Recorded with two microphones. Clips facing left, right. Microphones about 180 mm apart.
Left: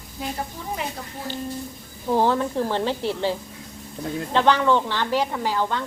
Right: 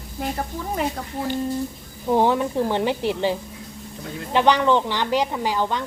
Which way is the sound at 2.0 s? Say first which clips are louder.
Right 2 dB; 15° right (ahead or behind).